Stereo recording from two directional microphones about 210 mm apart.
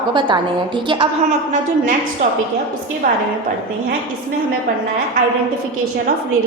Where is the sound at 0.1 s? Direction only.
20° right (ahead or behind).